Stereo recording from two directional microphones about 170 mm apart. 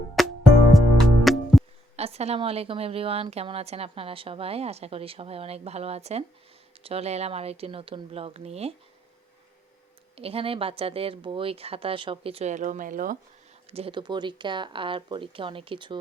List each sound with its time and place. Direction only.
0.2 s music: centre (ahead or behind)
2.0 s a woman's voice: 40° right (ahead or behind)
10.2 s a woman's voice: 35° right (ahead or behind); by 13.1 s 50° right (ahead or behind)
13.7 s speech: 35° right (ahead or behind)